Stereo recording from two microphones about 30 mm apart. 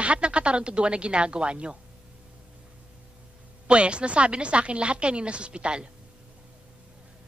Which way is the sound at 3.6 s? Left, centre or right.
Right.